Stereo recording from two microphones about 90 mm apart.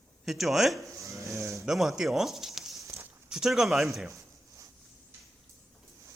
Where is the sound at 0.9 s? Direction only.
35° right (ahead or behind).